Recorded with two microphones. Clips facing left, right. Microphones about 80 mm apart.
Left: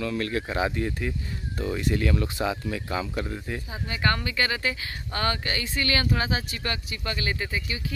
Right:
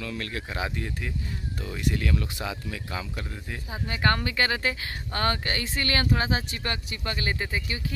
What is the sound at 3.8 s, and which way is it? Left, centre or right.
Speech, right.